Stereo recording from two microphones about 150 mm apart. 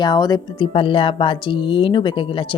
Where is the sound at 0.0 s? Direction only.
25° left (ahead or behind).